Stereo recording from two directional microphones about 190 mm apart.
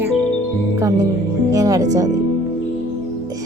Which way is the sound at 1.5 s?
15° right (ahead or behind).